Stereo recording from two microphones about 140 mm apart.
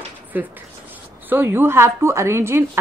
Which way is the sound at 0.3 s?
15° right (ahead or behind).